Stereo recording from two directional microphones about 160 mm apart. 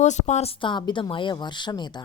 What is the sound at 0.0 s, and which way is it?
Speech, 45° left (ahead or behind).